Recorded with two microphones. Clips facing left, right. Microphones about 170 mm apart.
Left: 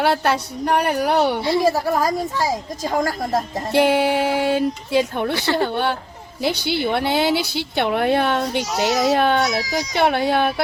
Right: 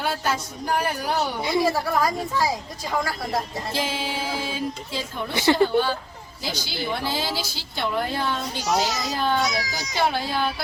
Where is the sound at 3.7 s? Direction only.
70° left (ahead or behind).